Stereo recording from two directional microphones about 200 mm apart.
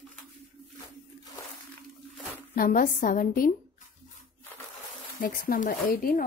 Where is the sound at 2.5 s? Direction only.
45° left (ahead or behind).